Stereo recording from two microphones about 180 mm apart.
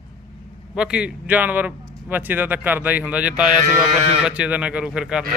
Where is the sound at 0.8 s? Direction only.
5° right (ahead or behind).